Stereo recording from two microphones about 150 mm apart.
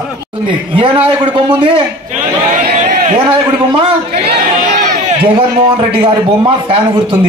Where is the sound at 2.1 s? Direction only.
55° right (ahead or behind).